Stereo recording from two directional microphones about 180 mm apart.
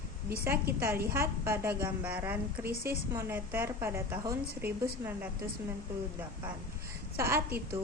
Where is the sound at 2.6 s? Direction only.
55° right (ahead or behind).